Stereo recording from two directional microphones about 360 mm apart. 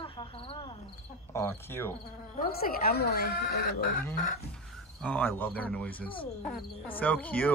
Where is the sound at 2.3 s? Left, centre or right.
Left.